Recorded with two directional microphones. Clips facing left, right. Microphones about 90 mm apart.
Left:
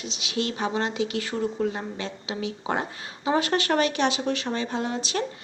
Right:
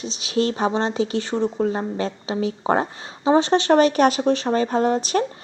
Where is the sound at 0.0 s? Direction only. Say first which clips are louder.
Right 7 dB; 35° right (ahead or behind).